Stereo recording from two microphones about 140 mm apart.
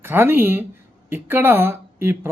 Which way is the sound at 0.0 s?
15° right (ahead or behind).